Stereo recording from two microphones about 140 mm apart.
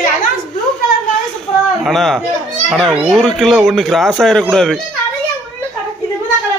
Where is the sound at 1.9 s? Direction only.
Centre (ahead or behind).